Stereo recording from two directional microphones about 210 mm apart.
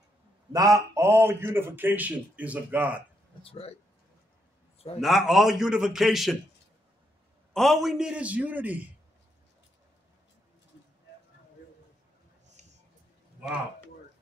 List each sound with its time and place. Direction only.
0.5 s a man's voice: 15° right (ahead or behind)
3.4 s speech: 25° left (ahead or behind)
5.0 s a man's voice: centre (ahead or behind)
7.5 s a man's voice: centre (ahead or behind)